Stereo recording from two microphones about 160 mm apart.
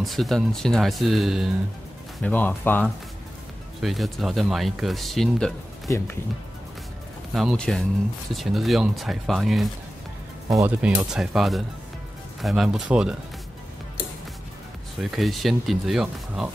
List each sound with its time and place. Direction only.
0.0 s speech: centre (ahead or behind)
2.2 s speech: 10° left (ahead or behind)
3.8 s speech: centre (ahead or behind)
5.9 s speech: 15° left (ahead or behind)
7.3 s speech: centre (ahead or behind)
10.6 s speech: 15° right (ahead or behind)
11.1 s speech: centre (ahead or behind)
15.0 s speech: centre (ahead or behind)